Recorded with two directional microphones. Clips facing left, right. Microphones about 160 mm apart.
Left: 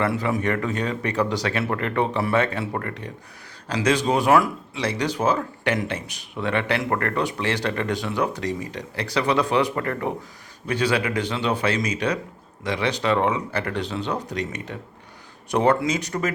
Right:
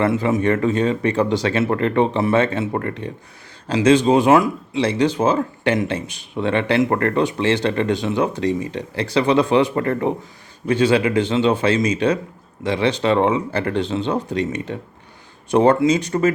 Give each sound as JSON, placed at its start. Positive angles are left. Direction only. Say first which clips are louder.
{"t": 0.0, "sound": "speech", "louder": "right 5 dB", "side_deg": -25}